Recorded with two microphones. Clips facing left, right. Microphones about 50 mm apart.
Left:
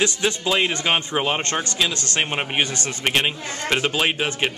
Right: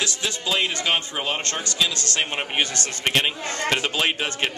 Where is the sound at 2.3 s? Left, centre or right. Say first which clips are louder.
Left 2 dB; centre.